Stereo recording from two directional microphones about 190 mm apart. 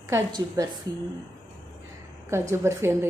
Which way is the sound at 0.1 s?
20° right (ahead or behind).